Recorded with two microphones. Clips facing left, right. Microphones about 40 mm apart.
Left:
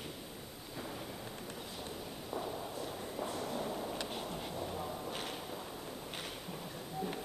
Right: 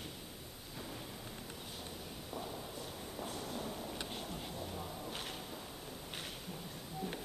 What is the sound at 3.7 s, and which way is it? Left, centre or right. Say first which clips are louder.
Vehicle: left 5 dB; centre.